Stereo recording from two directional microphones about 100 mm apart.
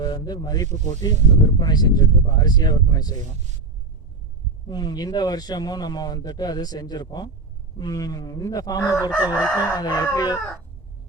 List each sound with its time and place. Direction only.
0.0 s a man's voice: 45° left (ahead or behind)
4.6 s a man's voice: 45° left (ahead or behind)